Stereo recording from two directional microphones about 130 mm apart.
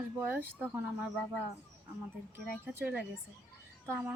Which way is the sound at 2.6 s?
15° right (ahead or behind).